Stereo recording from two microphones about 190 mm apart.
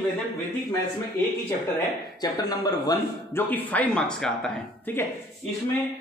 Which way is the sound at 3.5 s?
10° left (ahead or behind).